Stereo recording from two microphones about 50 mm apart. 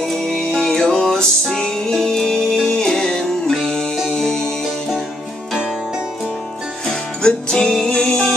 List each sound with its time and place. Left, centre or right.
0.1 s music: centre
6.9 s music: centre